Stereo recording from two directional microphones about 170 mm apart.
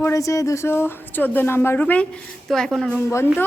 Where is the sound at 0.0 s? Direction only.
20° left (ahead or behind).